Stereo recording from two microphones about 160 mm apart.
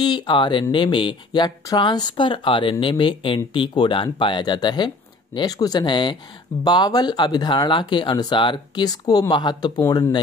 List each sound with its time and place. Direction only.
0.0 s speech: 30° left (ahead or behind)